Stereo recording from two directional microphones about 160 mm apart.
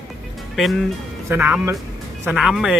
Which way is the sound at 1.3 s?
10° right (ahead or behind).